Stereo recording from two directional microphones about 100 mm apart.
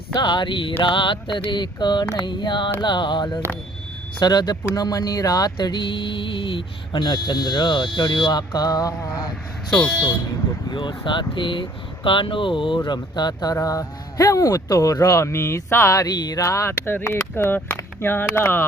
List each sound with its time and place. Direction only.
0.1 s speech: 50° left (ahead or behind)
9.6 s speech: 15° left (ahead or behind)
10.7 s speech: 50° left (ahead or behind); by 18.6 s 20° left (ahead or behind)